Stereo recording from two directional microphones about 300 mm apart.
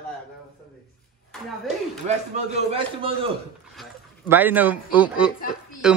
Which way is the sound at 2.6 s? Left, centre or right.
Centre.